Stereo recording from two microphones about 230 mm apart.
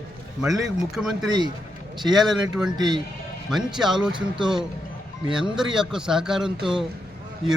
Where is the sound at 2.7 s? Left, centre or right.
Centre.